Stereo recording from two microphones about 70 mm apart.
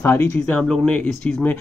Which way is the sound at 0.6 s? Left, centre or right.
Centre.